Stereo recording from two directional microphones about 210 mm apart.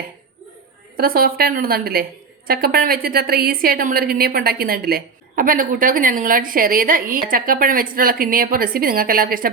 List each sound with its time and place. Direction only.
0.9 s a woman's voice: 45° right (ahead or behind)